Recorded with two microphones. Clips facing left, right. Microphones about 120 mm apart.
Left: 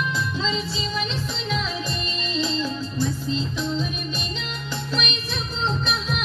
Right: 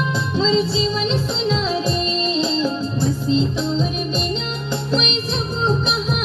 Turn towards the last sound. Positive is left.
turn(degrees=-35)  # may be behind; listen again after turning